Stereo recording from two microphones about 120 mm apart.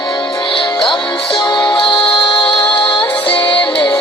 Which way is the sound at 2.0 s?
10° left (ahead or behind).